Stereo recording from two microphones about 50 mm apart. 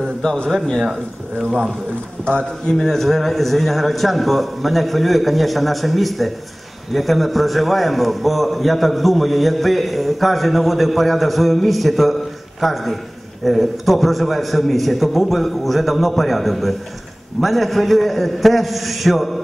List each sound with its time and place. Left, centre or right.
0.0 s a man's voice: centre
2.3 s a man's voice: left
2.8 s a man's voice: centre